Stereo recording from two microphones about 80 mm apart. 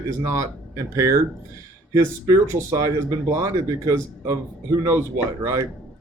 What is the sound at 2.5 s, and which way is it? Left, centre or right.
Speech, right.